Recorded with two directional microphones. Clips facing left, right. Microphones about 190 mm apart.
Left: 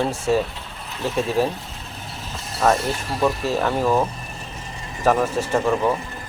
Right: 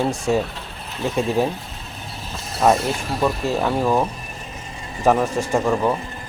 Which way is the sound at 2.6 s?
15° right (ahead or behind).